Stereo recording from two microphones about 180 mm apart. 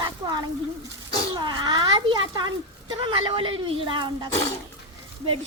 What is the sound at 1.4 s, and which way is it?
Speech, 25° right (ahead or behind).